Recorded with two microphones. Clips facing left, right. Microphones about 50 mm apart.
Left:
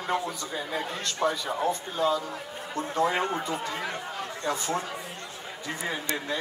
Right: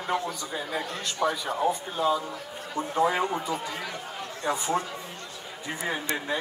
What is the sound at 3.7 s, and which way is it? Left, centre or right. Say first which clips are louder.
Speech: left 2 dB; left.